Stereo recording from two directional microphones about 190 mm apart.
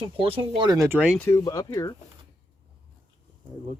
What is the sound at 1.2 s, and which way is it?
Speech, 15° left (ahead or behind).